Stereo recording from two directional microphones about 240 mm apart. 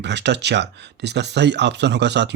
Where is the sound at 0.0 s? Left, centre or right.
Right.